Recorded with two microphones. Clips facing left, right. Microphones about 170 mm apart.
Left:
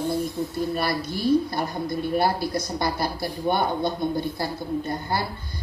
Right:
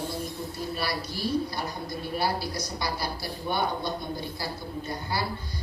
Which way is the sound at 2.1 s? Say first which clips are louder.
Left 5 dB; 50° left (ahead or behind).